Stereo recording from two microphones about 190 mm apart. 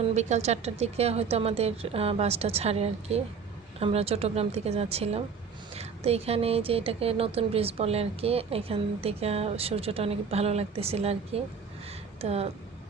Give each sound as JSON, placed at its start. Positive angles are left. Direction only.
{"t": 0.0, "sound": "speech", "side_deg": -35}